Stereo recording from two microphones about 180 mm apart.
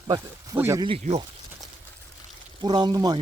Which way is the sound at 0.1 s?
20° right (ahead or behind).